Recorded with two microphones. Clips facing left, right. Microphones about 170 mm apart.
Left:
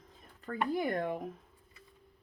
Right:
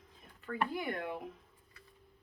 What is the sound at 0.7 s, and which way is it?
Speech, 40° left (ahead or behind).